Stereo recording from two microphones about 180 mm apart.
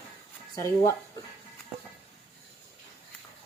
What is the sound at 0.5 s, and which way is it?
Speech, 15° left (ahead or behind).